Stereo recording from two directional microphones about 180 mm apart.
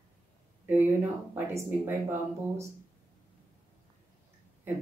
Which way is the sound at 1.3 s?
15° right (ahead or behind).